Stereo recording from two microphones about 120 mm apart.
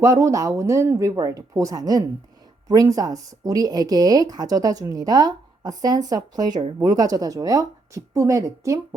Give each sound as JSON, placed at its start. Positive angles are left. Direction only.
{"t": 0.0, "sound": "speech", "side_deg": -25}